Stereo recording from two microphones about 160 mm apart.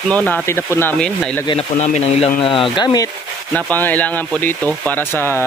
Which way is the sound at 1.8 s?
45° left (ahead or behind).